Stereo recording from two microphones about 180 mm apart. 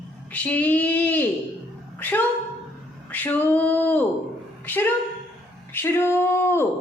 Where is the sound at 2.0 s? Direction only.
10° left (ahead or behind).